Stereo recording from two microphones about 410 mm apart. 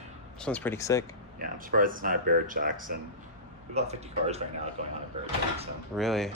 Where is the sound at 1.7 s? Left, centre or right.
Centre.